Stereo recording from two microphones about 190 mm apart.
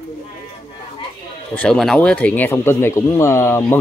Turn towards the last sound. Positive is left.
turn(degrees=15)  # may be behind; listen again after turning